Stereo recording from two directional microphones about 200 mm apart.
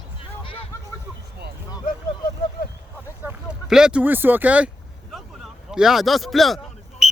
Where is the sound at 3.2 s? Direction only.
5° right (ahead or behind).